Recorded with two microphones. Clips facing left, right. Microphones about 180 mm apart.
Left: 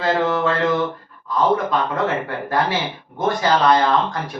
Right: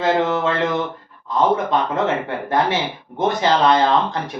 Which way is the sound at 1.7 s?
20° right (ahead or behind).